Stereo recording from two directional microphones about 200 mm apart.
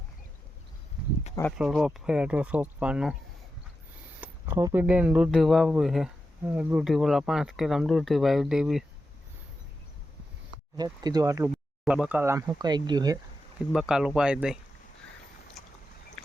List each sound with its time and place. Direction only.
1.5 s speech: 5° right (ahead or behind)
4.2 s speech: 10° right (ahead or behind)
10.8 s speech: 20° right (ahead or behind)
13.7 s speech: 5° right (ahead or behind)
15.6 s boat: centre (ahead or behind)